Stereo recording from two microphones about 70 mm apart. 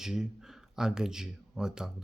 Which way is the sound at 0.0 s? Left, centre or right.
Centre.